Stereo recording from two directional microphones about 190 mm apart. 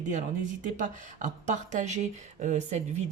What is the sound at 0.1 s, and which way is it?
Speech, 40° right (ahead or behind).